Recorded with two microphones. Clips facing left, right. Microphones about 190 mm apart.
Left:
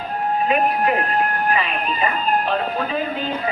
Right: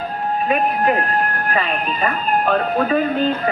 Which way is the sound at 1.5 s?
50° right (ahead or behind).